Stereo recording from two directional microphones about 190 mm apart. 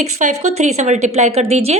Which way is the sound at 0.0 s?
40° right (ahead or behind).